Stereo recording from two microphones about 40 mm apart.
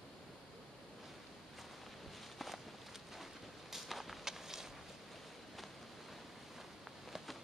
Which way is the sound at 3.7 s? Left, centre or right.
Centre.